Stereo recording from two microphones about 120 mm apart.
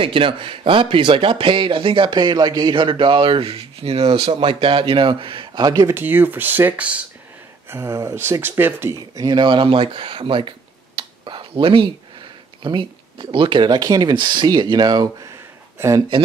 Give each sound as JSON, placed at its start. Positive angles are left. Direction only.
{"t": 0.0, "sound": "speech", "side_deg": -45}
{"t": 5.9, "sound": "speech", "side_deg": -15}
{"t": 7.7, "sound": "speech", "side_deg": -25}
{"t": 9.1, "sound": "speech", "side_deg": -35}
{"t": 11.0, "sound": "a sound", "side_deg": -45}
{"t": 12.6, "sound": "speech", "side_deg": -45}